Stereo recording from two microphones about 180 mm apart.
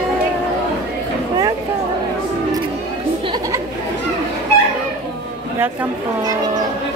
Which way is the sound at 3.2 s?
25° right (ahead or behind).